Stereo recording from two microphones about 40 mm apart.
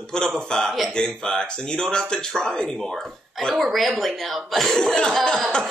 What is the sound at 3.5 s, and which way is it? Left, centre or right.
Speech, centre.